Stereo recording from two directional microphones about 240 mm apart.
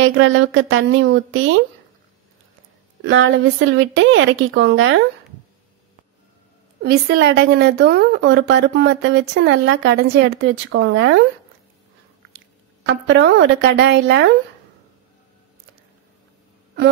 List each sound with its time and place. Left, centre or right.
0.0 s a woman's voice: right
3.0 s a woman's voice: right
6.8 s a woman's voice: right
12.8 s a woman's voice: right